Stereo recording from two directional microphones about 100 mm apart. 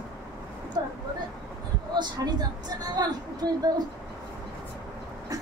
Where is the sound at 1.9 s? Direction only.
45° right (ahead or behind).